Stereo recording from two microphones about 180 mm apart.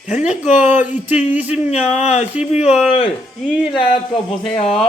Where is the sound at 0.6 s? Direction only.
10° right (ahead or behind).